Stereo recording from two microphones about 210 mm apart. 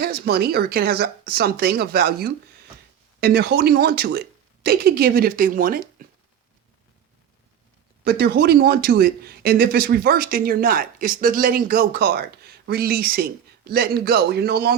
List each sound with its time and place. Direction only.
0.0 s speech: 50° right (ahead or behind)
8.0 s speech: 50° right (ahead or behind)